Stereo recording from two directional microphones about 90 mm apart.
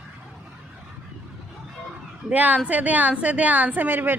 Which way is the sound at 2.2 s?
15° right (ahead or behind).